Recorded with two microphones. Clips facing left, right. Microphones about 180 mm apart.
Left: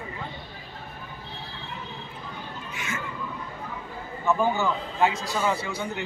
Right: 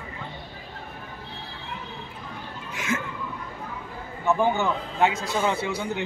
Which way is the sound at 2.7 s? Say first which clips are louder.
Right 7 dB; 90° right.